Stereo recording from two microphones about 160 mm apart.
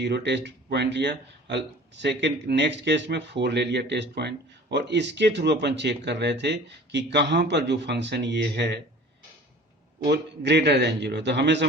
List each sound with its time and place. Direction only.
0.0 s speech: 90° right
10.0 s speech: 90° right